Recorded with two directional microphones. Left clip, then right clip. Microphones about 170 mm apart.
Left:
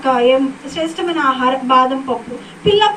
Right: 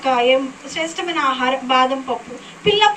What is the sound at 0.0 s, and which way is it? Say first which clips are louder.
A woman's voice: left 3 dB; 50° left (ahead or behind).